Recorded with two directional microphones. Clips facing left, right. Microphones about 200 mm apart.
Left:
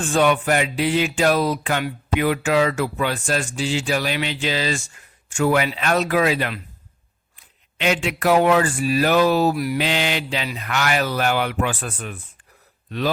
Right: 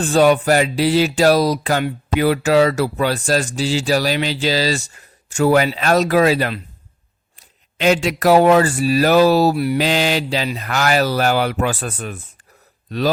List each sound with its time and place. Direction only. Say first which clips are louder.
0.0 s speech: right 5 dB; 35° right (ahead or behind)